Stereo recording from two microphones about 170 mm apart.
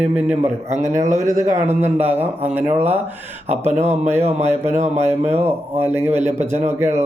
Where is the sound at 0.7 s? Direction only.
45° right (ahead or behind).